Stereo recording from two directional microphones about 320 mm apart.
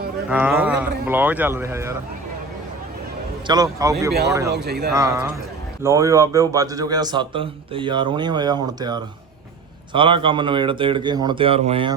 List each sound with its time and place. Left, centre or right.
0.3 s speech: centre
3.4 s a man's voice: centre
4.5 s speech: right
4.9 s a man's voice: centre